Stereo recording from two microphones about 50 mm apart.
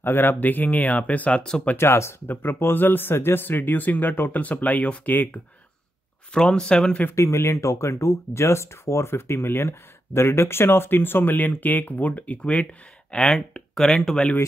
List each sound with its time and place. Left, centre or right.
0.0 s speech: left
1.8 s speech: left
2.2 s speech: left
6.3 s speech: centre
7.2 s speech: left
7.6 s speech: left; by 14.3 s centre